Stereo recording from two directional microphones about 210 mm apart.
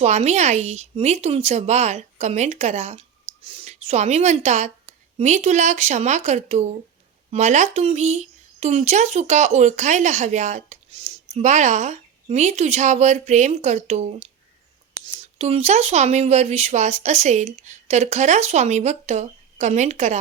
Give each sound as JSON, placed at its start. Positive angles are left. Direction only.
{"t": 0.0, "sound": "speech", "side_deg": -30}